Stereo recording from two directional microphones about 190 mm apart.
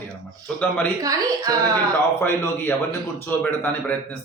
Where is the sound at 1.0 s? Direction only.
20° right (ahead or behind).